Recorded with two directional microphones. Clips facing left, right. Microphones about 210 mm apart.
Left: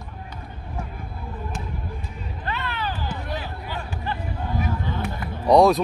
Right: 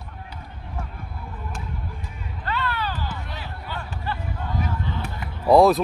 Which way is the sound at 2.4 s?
15° left (ahead or behind).